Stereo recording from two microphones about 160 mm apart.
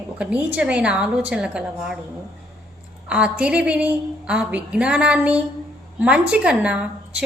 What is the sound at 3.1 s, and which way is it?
A woman's voice, 10° right (ahead or behind).